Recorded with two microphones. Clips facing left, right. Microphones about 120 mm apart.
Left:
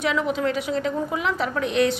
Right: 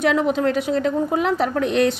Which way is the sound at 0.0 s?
50° right (ahead or behind).